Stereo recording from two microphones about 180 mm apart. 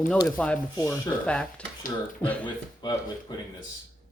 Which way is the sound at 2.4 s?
25° left (ahead or behind).